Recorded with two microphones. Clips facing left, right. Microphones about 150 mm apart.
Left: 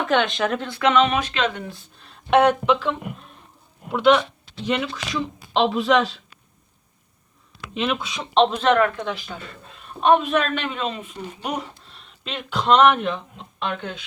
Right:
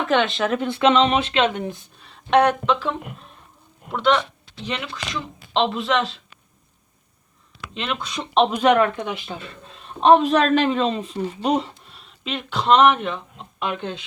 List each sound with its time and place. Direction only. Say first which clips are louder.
0.0 s speech: right 1 dB; centre (ahead or behind)
0.6 s speech: right 2 dB; 25° right (ahead or behind)
2.0 s speech: even; centre (ahead or behind)
2.4 s speech: left 2 dB; 10° left (ahead or behind)
3.9 s speech: left 3 dB; 5° left (ahead or behind)
7.7 s speech: left 4 dB; 5° left (ahead or behind); by 11.7 s 30° right (ahead or behind)
11.9 s speech: right 3 dB; centre (ahead or behind)